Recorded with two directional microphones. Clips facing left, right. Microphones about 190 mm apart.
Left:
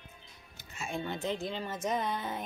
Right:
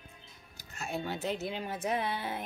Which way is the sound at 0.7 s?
Centre (ahead or behind).